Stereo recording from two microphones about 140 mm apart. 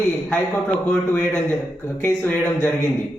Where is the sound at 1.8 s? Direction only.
15° left (ahead or behind).